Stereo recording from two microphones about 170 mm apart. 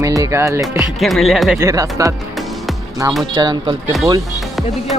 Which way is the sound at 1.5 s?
20° right (ahead or behind).